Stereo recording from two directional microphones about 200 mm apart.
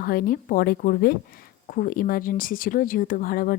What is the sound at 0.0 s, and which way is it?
Speech, 45° left (ahead or behind).